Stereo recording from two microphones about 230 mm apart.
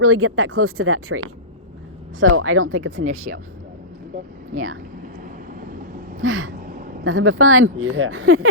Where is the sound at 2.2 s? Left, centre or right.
Right.